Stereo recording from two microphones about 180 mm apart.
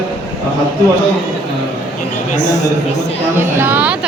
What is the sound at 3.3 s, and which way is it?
Speech, 10° right (ahead or behind).